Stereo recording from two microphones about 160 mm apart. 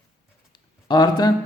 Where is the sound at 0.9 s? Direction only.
25° left (ahead or behind).